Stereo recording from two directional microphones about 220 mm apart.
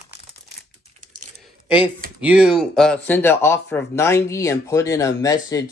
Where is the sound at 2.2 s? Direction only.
5° right (ahead or behind); by 5.3 s 15° left (ahead or behind).